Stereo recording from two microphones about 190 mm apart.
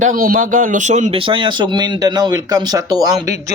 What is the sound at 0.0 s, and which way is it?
Speech, 40° right (ahead or behind).